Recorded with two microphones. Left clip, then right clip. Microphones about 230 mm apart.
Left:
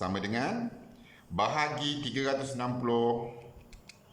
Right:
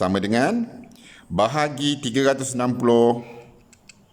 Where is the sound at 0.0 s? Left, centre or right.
Right.